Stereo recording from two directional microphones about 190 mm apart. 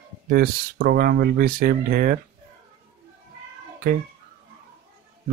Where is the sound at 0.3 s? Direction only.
55° right (ahead or behind).